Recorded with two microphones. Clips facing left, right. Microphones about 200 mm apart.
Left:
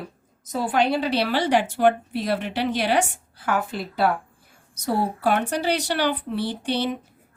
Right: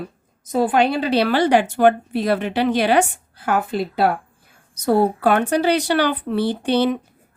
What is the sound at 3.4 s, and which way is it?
Speech, 55° right (ahead or behind).